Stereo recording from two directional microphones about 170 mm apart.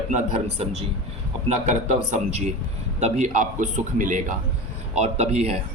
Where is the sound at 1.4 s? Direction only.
45° right (ahead or behind).